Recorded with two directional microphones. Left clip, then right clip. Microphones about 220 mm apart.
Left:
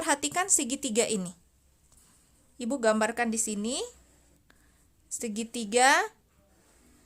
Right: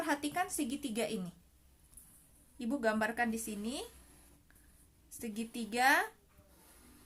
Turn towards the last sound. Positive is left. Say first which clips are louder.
# left 7 dB
turn(degrees=40)  # may be behind; listen again after turning